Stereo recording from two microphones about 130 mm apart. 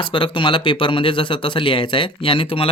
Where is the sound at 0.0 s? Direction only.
40° left (ahead or behind).